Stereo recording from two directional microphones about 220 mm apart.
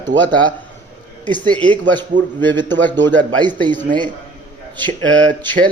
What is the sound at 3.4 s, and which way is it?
Speech, 20° right (ahead or behind).